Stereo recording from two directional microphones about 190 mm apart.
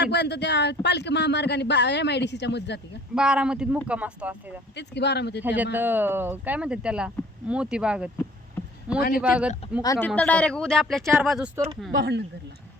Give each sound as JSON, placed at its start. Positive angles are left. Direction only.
{"t": 0.0, "sound": "speech", "side_deg": 65}
{"t": 3.2, "sound": "speech", "side_deg": -5}
{"t": 4.8, "sound": "speech", "side_deg": 60}
{"t": 5.4, "sound": "speech", "side_deg": -10}
{"t": 9.0, "sound": "speech", "side_deg": 55}
{"t": 9.2, "sound": "speech", "side_deg": -5}
{"t": 9.8, "sound": "speech", "side_deg": 15}
{"t": 11.5, "sound": "speech", "side_deg": -15}
{"t": 11.9, "sound": "speech", "side_deg": -55}